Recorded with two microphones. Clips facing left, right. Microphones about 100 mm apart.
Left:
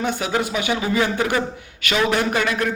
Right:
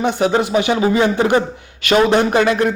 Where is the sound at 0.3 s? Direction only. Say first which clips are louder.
Right 6 dB; 25° right (ahead or behind).